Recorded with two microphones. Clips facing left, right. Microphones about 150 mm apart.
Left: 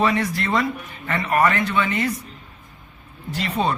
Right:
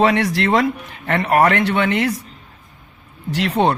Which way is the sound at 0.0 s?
85° right.